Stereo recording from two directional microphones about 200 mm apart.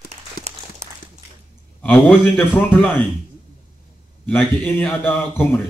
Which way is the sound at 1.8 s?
10° left (ahead or behind).